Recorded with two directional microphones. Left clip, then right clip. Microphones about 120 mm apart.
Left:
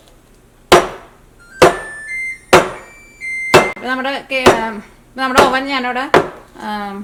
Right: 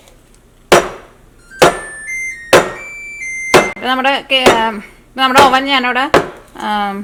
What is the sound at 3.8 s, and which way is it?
A woman's voice, 20° right (ahead or behind).